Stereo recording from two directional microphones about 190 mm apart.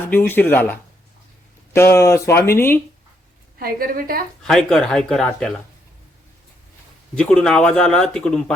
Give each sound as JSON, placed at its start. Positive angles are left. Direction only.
{"t": 0.0, "sound": "speech", "side_deg": 10}
{"t": 3.6, "sound": "a woman's voice", "side_deg": -50}
{"t": 4.4, "sound": "speech", "side_deg": 0}
{"t": 7.2, "sound": "speech", "side_deg": 5}